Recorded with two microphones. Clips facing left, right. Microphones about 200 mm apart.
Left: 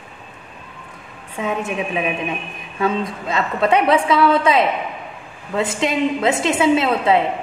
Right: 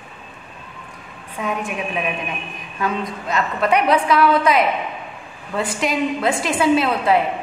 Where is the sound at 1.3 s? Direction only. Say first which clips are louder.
Left 2 dB; 25° left (ahead or behind).